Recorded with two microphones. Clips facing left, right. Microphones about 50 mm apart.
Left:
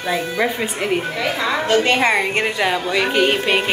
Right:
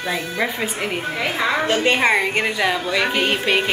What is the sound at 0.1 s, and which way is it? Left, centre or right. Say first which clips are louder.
Speech: left 4 dB; centre.